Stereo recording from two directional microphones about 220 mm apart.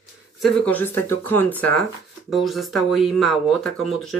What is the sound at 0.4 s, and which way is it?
Speech, 5° left (ahead or behind).